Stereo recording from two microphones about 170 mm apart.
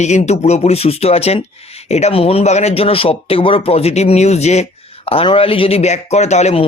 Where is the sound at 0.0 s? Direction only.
40° left (ahead or behind).